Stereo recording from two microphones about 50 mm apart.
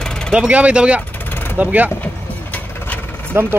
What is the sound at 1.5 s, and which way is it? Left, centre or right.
Speech, right.